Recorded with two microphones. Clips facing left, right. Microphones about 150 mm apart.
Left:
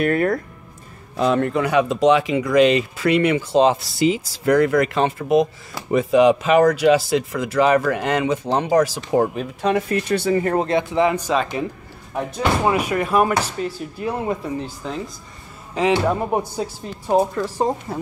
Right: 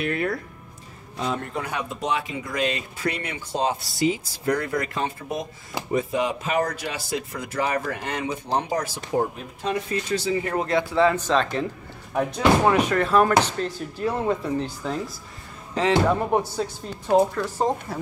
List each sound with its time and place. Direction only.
0.0 s speech: 45° left (ahead or behind)
1.1 s speech: 70° left (ahead or behind)
10.4 s a man's voice: 40° left (ahead or behind)
10.7 s speech: 20° left (ahead or behind)